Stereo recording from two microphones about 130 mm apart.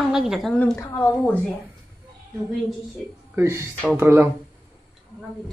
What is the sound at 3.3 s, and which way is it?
Speech, 20° right (ahead or behind).